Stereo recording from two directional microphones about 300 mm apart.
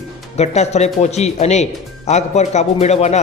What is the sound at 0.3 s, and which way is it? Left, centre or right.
A man's voice, left.